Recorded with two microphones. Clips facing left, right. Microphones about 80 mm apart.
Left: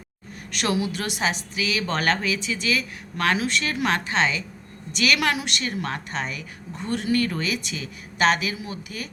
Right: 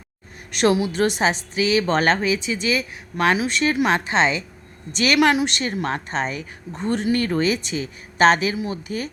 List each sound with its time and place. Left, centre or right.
0.5 s a woman's voice: right